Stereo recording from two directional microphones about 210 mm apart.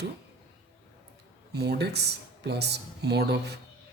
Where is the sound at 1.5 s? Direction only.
50° right (ahead or behind).